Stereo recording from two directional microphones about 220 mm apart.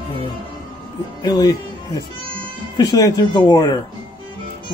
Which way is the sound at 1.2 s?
15° left (ahead or behind).